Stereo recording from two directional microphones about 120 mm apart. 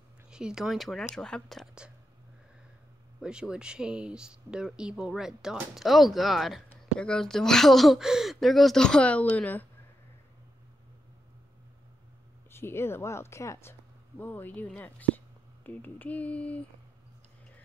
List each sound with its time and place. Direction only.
0.3 s speech: 5° right (ahead or behind)
3.2 s speech: 5° right (ahead or behind); by 9.7 s 15° left (ahead or behind)
12.4 s speech: 20° left (ahead or behind)